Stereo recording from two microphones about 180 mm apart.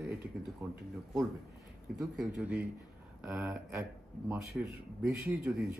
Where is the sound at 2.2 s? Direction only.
5° right (ahead or behind).